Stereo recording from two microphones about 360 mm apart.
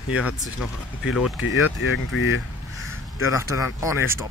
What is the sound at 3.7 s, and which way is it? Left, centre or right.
Speech, centre.